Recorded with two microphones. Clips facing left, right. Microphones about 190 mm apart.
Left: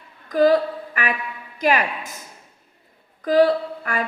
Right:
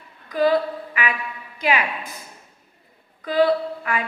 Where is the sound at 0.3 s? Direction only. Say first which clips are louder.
Left 3 dB; 45° left (ahead or behind).